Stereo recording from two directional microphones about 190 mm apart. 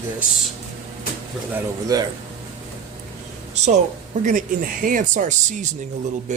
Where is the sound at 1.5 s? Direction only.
20° right (ahead or behind).